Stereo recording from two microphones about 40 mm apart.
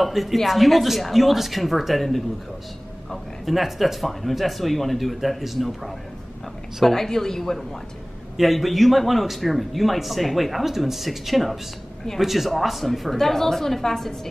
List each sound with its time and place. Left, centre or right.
0.0 s speech: centre